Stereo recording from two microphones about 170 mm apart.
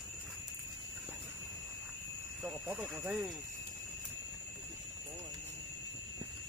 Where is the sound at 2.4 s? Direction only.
5° right (ahead or behind).